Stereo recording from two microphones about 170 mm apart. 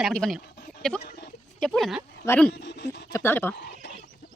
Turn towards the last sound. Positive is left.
turn(degrees=15)  # may be behind; listen again after turning